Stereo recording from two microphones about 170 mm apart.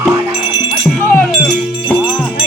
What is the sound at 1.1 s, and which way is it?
Music, 5° left (ahead or behind).